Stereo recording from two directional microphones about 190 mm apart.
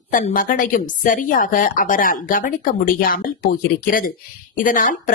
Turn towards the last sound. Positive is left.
turn(degrees=45)  # may be behind; listen again after turning